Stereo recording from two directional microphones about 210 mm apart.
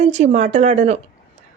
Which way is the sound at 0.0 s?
35° right (ahead or behind).